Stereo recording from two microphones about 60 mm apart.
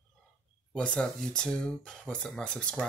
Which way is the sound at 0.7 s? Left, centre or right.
Centre.